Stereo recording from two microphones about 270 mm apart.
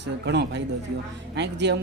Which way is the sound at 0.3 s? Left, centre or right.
Right.